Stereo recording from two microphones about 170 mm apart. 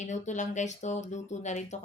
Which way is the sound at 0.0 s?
45° left (ahead or behind).